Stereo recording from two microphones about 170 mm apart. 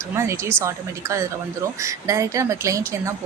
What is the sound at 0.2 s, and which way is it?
A woman's voice, 15° right (ahead or behind).